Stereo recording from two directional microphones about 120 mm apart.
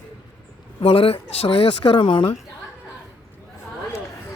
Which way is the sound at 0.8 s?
55° left (ahead or behind).